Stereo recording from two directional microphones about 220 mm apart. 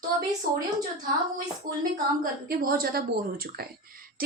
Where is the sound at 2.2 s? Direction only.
40° right (ahead or behind).